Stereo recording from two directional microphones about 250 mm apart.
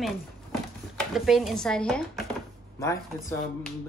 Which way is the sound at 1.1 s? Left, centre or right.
Centre.